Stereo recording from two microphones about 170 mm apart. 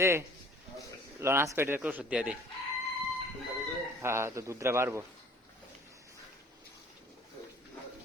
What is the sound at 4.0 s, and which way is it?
Speech, 15° right (ahead or behind).